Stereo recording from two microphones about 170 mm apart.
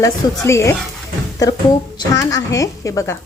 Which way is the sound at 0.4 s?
15° left (ahead or behind).